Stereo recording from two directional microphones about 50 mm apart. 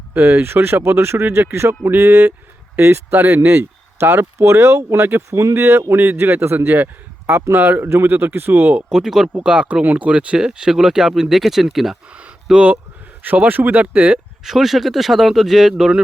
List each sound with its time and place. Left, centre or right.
0.1 s speech: right
5.0 s speech: right
5.4 s speech: right
6.7 s speech: right
8.9 s speech: centre
9.4 s speech: right
13.2 s speech: right
14.4 s speech: centre